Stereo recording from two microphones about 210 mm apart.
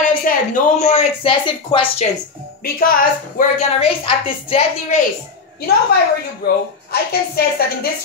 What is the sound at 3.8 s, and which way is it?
Speech, 25° left (ahead or behind).